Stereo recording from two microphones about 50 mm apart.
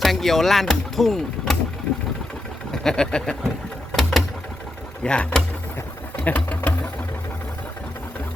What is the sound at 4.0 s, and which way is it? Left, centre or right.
Sewing machine, centre.